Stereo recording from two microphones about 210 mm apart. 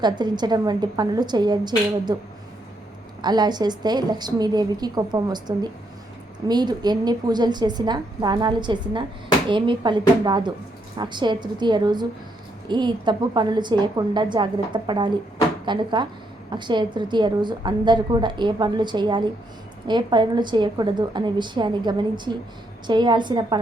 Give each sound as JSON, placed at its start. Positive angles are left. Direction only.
{"t": 0.0, "sound": "a woman's voice", "side_deg": -20}
{"t": 3.2, "sound": "a woman's voice", "side_deg": -20}